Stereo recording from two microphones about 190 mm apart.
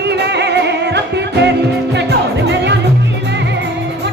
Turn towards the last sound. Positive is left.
turn(degrees=-65)  # may be behind; listen again after turning